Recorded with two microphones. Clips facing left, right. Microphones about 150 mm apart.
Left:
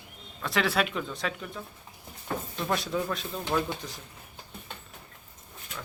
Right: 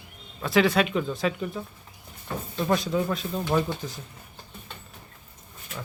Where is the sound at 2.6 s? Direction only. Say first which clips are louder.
Right 6 dB; centre (ahead or behind).